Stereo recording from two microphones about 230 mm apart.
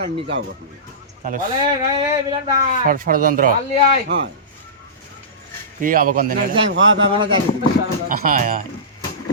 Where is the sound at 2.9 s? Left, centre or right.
Right.